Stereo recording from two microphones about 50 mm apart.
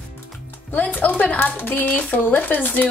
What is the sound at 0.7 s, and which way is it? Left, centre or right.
Speech, left.